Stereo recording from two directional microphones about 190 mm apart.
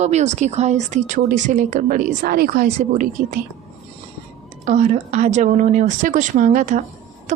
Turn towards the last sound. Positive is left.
turn(degrees=-40)  # may be behind; listen again after turning